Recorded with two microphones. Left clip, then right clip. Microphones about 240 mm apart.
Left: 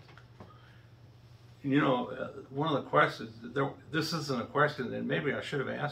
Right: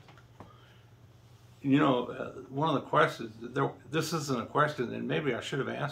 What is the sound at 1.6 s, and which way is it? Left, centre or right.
Speech, right.